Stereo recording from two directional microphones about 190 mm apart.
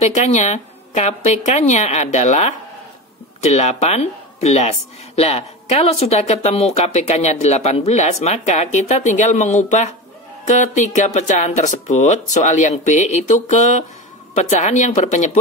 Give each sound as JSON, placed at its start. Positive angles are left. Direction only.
{"t": 0.0, "sound": "speech", "side_deg": 35}